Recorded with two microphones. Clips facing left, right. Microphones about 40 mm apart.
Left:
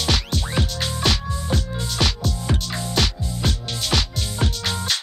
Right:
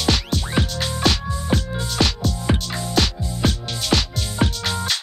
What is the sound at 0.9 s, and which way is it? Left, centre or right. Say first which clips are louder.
Music: right 2 dB; centre.